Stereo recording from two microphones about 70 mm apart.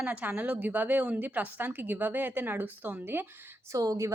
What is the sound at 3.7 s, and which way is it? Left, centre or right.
Speech, right.